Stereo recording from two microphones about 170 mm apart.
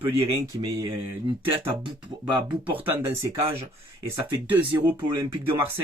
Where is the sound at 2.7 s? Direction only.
10° right (ahead or behind).